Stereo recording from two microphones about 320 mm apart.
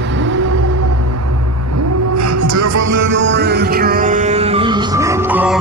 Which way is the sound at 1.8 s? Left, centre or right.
Right.